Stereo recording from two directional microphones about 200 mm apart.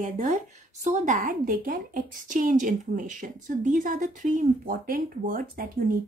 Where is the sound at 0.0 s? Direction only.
35° right (ahead or behind).